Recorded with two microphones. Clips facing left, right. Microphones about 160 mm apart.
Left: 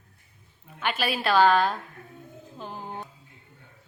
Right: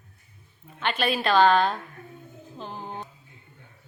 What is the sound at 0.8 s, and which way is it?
Speech, 5° left (ahead or behind).